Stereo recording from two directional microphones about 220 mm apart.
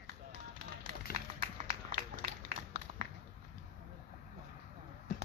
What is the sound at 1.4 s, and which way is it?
Run, 40° right (ahead or behind).